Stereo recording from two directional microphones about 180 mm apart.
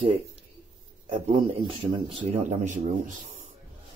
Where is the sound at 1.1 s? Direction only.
30° right (ahead or behind).